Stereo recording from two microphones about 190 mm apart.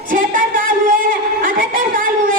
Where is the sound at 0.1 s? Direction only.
45° right (ahead or behind).